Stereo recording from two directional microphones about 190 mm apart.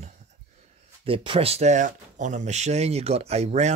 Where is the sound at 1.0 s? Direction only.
30° right (ahead or behind).